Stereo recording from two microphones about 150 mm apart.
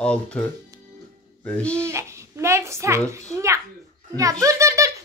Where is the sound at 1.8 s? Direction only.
20° right (ahead or behind).